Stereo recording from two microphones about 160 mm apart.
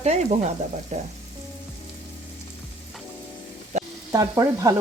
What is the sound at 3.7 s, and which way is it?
Frying, 50° right (ahead or behind).